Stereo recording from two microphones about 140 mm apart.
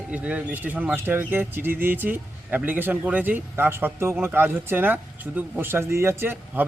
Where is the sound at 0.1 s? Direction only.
10° right (ahead or behind).